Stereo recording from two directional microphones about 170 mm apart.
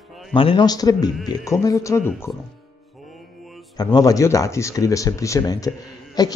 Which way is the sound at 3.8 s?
25° left (ahead or behind).